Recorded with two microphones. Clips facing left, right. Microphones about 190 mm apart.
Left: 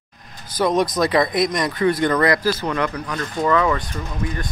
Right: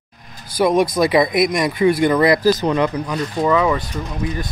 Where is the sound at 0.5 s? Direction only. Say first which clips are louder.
Right 3 dB; 10° right (ahead or behind).